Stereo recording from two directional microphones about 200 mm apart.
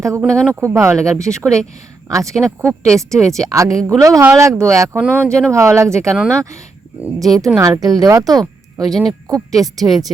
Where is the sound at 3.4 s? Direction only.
15° right (ahead or behind).